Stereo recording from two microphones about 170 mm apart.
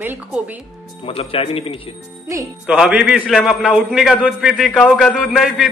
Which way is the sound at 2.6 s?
5° right (ahead or behind).